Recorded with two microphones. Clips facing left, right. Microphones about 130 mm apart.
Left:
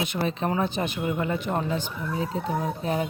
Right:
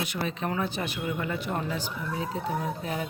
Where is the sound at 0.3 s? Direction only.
30° left (ahead or behind).